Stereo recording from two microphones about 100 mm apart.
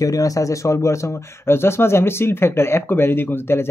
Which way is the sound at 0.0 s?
35° left (ahead or behind).